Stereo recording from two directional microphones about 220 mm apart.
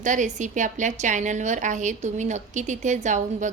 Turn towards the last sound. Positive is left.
turn(degrees=-35)  # may be behind; listen again after turning